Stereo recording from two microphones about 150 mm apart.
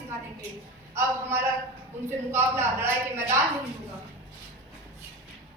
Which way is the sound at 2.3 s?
15° right (ahead or behind).